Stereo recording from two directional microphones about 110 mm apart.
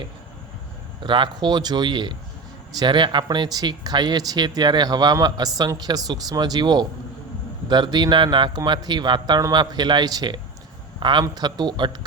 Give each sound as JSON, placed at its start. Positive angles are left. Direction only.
{"t": 1.0, "sound": "a man's voice", "side_deg": -45}